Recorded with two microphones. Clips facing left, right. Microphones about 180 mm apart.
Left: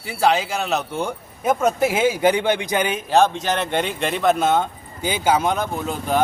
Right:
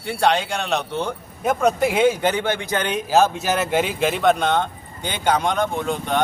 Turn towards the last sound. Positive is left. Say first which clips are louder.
# even
turn(degrees=5)  # may be behind; listen again after turning